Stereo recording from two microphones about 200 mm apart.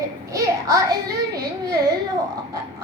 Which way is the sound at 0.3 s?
15° right (ahead or behind).